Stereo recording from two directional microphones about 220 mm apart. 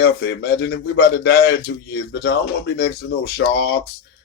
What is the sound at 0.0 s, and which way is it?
Speech, 50° left (ahead or behind).